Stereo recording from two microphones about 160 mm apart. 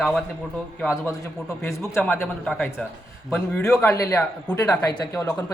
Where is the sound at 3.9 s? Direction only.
20° left (ahead or behind).